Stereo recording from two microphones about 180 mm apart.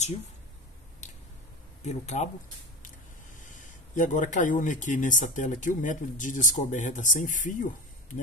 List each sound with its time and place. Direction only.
1.8 s speech: 40° left (ahead or behind)
3.3 s speech: 45° left (ahead or behind)